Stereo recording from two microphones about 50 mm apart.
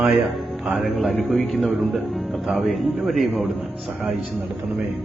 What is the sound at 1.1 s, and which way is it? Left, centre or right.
Music, centre.